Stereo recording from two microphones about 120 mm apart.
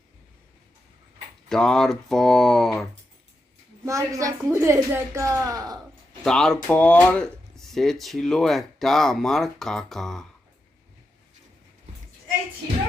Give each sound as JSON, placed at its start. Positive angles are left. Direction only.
{"t": 1.5, "sound": "speech", "side_deg": 5}
{"t": 3.8, "sound": "a woman's voice", "side_deg": -25}
{"t": 6.2, "sound": "speech", "side_deg": 5}